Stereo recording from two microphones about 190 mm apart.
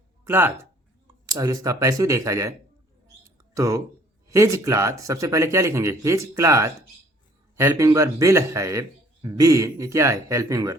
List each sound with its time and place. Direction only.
0.3 s speech: 10° right (ahead or behind)